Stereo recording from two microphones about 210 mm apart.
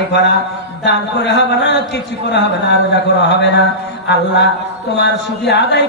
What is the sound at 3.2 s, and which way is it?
Speech, 55° left (ahead or behind).